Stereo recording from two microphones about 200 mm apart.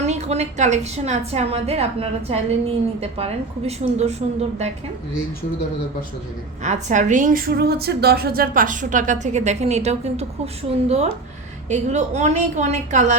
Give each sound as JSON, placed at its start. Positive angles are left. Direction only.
{"t": 0.0, "sound": "a woman's voice", "side_deg": -35}
{"t": 6.6, "sound": "a woman's voice", "side_deg": -35}